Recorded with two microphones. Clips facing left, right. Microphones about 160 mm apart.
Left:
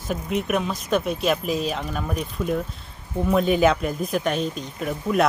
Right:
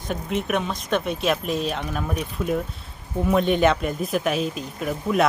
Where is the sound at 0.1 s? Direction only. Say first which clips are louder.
Left 1 dB; centre (ahead or behind).